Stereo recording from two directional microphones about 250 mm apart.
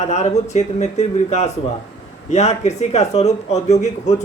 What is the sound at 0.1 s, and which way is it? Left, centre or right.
Speech, left.